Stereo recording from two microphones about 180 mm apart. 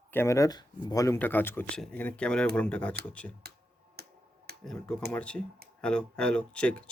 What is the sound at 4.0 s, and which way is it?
Tick-tock, 60° right (ahead or behind).